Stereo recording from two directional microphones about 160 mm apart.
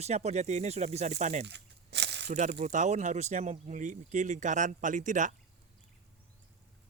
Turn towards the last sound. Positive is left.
turn(degrees=-50)  # may be behind; listen again after turning